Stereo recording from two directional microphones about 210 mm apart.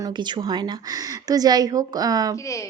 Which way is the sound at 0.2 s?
20° right (ahead or behind).